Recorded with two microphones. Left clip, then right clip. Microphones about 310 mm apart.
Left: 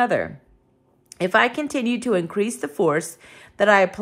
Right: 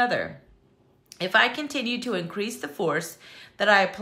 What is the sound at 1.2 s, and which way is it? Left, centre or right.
Speech, centre.